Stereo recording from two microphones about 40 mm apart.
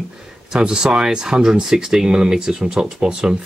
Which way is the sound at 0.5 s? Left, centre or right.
Centre.